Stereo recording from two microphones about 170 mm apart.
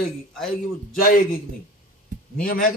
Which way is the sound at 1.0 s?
60° left (ahead or behind).